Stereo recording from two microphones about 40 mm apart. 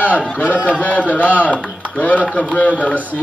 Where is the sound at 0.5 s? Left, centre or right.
Right.